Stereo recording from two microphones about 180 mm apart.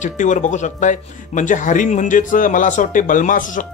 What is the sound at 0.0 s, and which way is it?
Speech, 45° left (ahead or behind).